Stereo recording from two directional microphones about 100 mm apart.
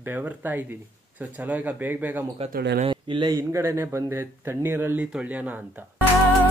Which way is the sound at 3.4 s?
30° right (ahead or behind).